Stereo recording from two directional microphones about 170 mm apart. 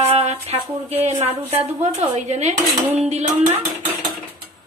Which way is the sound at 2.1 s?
40° right (ahead or behind).